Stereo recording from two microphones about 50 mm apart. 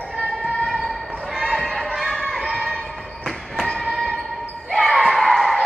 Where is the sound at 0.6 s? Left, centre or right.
Centre.